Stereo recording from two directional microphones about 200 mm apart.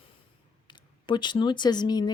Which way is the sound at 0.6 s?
25° left (ahead or behind).